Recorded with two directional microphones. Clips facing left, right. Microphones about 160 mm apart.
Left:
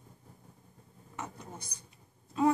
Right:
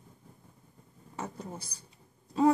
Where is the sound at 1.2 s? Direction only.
30° right (ahead or behind).